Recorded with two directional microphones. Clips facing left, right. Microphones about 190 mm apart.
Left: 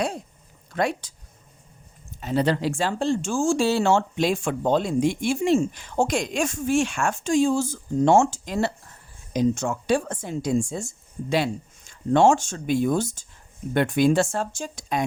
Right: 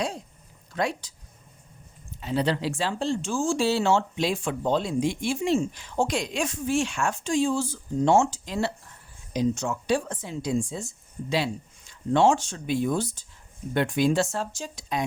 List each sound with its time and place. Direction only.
0.7 s speech: 55° left (ahead or behind)
2.2 s speech: 45° left (ahead or behind)